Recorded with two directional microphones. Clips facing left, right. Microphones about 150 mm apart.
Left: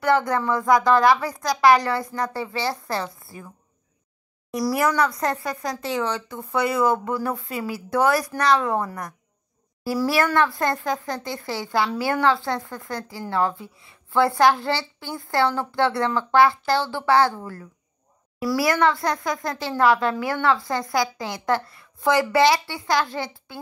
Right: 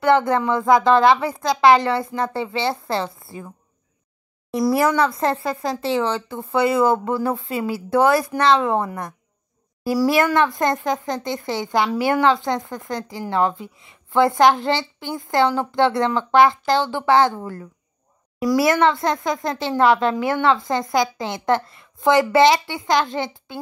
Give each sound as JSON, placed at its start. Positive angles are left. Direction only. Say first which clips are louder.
{"t": 0.0, "sound": "speech", "louder": "right 4 dB", "side_deg": -25}
{"t": 4.5, "sound": "speech", "louder": "right 4 dB", "side_deg": -25}